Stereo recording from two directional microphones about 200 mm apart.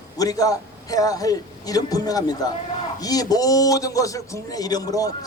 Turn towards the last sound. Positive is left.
turn(degrees=20)  # may be behind; listen again after turning